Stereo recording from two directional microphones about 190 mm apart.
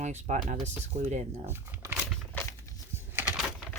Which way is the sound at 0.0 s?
40° right (ahead or behind).